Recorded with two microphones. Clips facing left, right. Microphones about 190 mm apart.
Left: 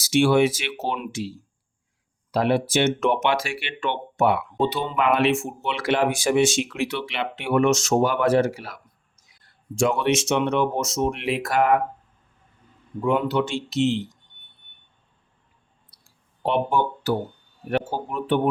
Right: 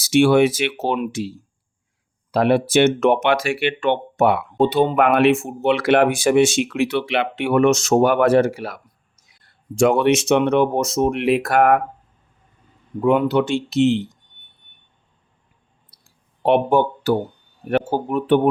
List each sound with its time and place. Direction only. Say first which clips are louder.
0.0 s speech: right 4 dB; 60° right (ahead or behind)
2.3 s speech: right 5 dB; 65° right (ahead or behind)
13.0 s speech: right 5 dB; 60° right (ahead or behind)
16.4 s speech: right 6 dB; 60° right (ahead or behind)